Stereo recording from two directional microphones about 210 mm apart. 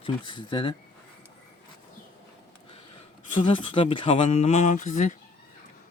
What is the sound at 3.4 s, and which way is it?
Speech, 25° left (ahead or behind).